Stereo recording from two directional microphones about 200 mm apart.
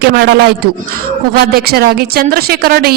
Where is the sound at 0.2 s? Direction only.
55° right (ahead or behind).